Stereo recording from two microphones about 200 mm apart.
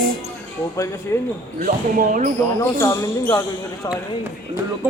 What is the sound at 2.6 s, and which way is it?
Speech, 15° left (ahead or behind).